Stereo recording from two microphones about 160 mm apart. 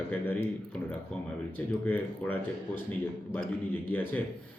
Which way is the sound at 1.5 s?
10° left (ahead or behind).